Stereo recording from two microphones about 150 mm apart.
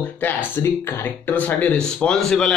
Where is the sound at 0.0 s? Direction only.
10° left (ahead or behind).